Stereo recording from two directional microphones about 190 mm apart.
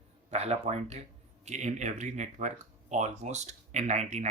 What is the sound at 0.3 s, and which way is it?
Speech, 35° right (ahead or behind).